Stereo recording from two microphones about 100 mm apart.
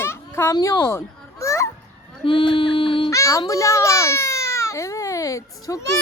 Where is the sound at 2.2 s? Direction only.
55° left (ahead or behind).